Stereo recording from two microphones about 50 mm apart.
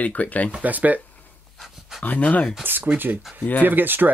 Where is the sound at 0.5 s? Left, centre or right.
Right.